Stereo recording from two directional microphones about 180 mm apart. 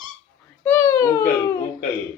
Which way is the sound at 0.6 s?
10° left (ahead or behind).